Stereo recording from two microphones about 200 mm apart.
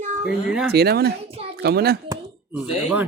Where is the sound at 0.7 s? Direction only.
50° right (ahead or behind).